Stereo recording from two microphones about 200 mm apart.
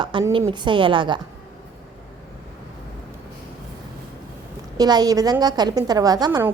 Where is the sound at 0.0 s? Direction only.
25° right (ahead or behind).